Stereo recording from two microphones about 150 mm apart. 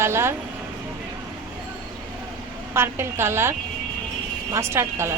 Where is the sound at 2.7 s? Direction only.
15° right (ahead or behind).